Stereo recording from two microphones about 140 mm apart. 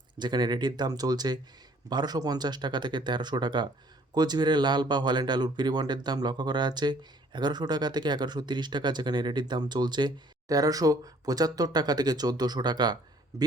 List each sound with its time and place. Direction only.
0.2 s speech: 30° right (ahead or behind)